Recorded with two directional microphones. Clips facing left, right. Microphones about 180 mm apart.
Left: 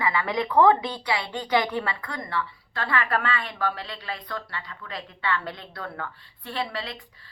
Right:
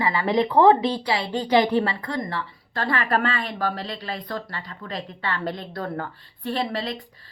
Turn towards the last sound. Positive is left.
turn(degrees=-40)  # may be behind; listen again after turning